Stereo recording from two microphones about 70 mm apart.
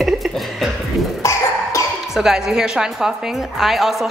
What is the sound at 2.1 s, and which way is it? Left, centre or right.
A woman's voice, centre.